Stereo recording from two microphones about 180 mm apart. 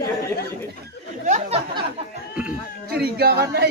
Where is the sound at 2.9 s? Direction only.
60° right (ahead or behind).